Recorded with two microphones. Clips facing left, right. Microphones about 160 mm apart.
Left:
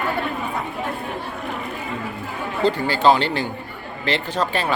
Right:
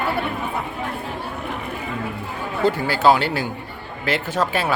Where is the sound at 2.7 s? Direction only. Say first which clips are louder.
Even; 5° right (ahead or behind).